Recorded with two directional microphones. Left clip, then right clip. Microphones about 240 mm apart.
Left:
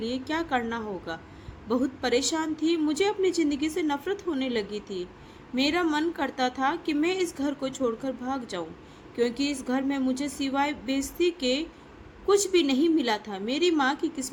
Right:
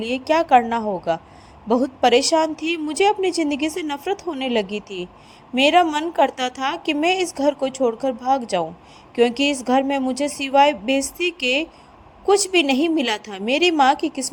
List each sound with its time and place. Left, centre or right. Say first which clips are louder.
0.1 s a woman's voice: right 15 dB; right